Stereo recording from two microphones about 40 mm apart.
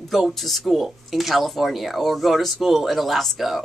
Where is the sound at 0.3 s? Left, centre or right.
Centre.